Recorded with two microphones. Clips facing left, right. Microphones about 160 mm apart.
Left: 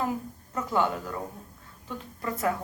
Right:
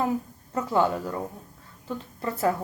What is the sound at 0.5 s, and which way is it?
Speech, 30° right (ahead or behind).